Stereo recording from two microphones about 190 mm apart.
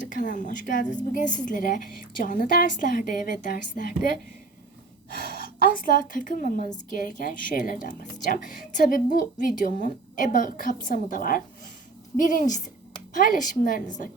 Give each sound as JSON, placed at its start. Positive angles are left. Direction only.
{"t": 0.0, "sound": "a woman's voice", "side_deg": 45}
{"t": 5.2, "sound": "a woman's voice", "side_deg": 50}